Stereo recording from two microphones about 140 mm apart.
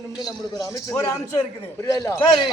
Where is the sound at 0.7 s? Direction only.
25° left (ahead or behind).